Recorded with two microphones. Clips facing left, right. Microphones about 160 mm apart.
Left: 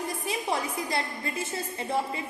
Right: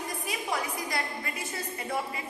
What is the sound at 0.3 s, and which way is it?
A woman's voice, 25° left (ahead or behind).